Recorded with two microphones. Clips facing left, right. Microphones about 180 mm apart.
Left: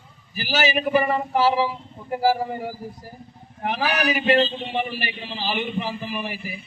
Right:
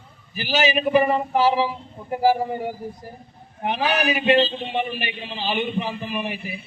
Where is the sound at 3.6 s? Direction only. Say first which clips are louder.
Right 1 dB; 20° right (ahead or behind).